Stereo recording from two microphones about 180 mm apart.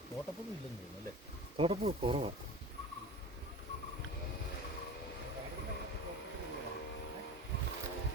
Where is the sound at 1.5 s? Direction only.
30° right (ahead or behind).